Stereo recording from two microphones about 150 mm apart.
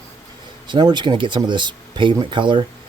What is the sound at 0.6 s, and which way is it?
Speech, 30° right (ahead or behind).